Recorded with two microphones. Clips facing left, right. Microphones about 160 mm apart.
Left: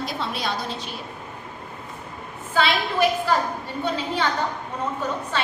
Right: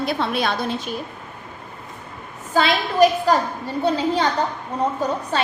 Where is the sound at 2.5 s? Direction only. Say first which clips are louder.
Right 3 dB; 40° right (ahead or behind).